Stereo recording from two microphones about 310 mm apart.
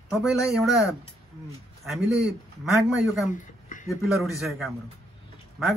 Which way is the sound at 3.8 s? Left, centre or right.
Centre.